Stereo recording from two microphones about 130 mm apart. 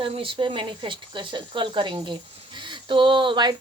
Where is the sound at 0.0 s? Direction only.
40° right (ahead or behind).